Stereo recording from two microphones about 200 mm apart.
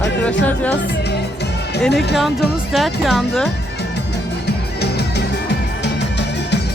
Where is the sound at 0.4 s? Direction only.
5° left (ahead or behind).